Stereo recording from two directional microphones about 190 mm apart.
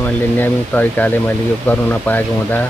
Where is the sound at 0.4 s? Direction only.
10° left (ahead or behind).